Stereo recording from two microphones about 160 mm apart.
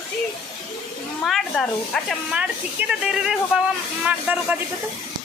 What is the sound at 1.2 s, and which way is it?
Speech, centre (ahead or behind).